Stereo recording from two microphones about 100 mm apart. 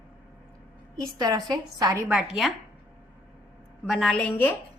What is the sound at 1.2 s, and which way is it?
Speech, 40° right (ahead or behind).